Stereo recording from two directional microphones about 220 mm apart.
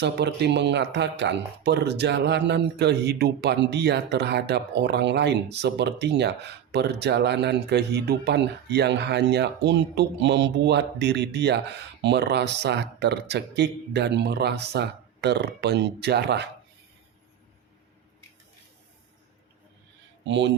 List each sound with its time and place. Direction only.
0.0 s speech: 50° right (ahead or behind)
20.2 s speech: 55° right (ahead or behind)